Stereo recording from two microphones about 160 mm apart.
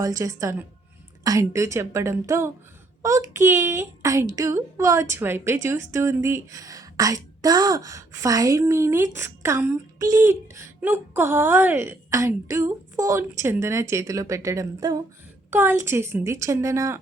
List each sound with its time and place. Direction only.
0.0 s speech: 20° right (ahead or behind)
15.4 s speech: 15° right (ahead or behind)